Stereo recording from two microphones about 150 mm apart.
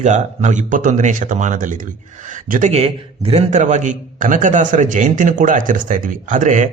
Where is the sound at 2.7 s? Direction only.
40° right (ahead or behind).